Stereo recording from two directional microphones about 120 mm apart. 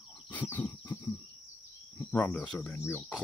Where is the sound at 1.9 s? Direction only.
10° left (ahead or behind).